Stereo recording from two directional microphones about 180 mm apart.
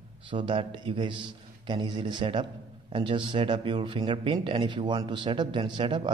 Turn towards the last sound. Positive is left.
turn(degrees=-25)  # may be behind; listen again after turning